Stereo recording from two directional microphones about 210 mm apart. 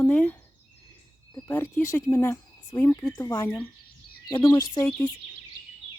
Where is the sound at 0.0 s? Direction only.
5° left (ahead or behind).